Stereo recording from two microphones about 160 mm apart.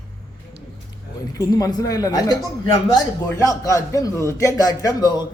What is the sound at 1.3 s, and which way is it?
A man's voice, 25° left (ahead or behind).